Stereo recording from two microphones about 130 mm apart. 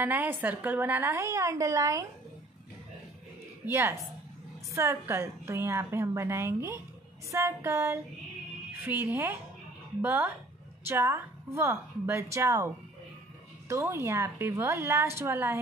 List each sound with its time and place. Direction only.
0.0 s speech: 15° right (ahead or behind)
3.7 s a woman's voice: 20° right (ahead or behind)